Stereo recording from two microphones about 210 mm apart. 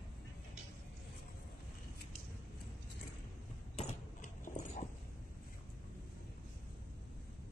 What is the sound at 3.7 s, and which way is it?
Mechanisms, 30° left (ahead or behind).